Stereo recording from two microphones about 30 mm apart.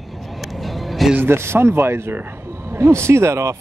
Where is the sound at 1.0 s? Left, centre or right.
Centre.